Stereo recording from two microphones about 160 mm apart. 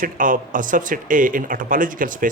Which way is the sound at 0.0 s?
55° right (ahead or behind).